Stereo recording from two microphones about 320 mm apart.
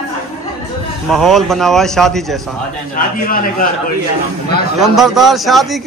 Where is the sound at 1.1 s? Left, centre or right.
Centre.